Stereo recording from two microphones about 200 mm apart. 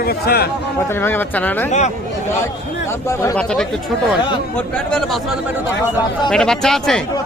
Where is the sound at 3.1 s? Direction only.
15° left (ahead or behind).